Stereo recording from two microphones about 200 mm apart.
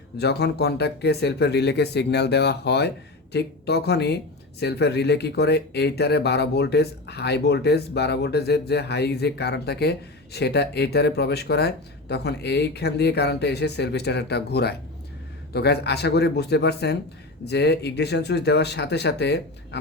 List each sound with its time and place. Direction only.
0.2 s speech: 55° left (ahead or behind)